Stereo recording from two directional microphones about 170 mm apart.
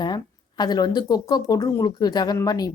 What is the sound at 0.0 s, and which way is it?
Speech, 25° left (ahead or behind).